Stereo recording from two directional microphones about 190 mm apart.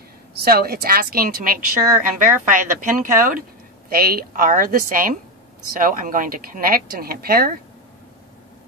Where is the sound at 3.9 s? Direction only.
50° right (ahead or behind).